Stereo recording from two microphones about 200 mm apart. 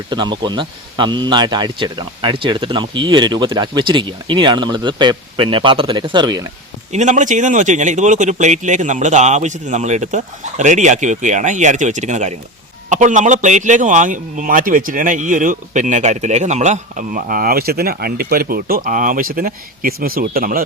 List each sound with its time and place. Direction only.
0.1 s speech: 20° right (ahead or behind)
6.9 s a man's voice: 35° right (ahead or behind)